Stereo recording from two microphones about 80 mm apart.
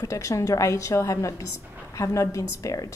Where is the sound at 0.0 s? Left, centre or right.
Left.